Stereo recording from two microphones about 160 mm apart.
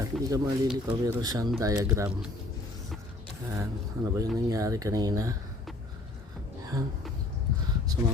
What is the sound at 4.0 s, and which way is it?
Speech, 20° right (ahead or behind).